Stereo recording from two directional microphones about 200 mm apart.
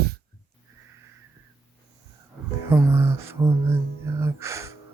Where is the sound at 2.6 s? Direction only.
10° right (ahead or behind).